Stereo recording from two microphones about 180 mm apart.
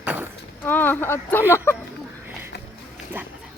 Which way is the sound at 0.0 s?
10° right (ahead or behind).